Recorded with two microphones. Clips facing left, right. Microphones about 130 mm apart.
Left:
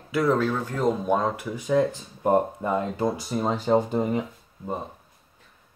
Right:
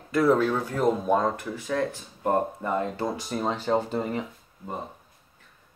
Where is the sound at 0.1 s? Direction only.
Centre (ahead or behind); by 4.7 s 15° left (ahead or behind).